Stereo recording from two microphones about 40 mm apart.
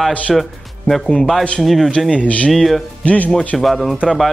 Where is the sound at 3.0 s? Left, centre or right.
Left.